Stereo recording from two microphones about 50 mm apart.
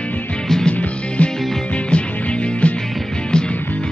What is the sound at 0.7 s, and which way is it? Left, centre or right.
Music, left.